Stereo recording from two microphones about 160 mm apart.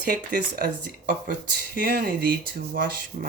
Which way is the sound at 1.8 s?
65° right (ahead or behind).